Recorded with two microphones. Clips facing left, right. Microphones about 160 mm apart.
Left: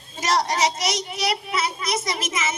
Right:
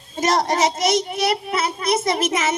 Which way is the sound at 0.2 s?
50° right (ahead or behind).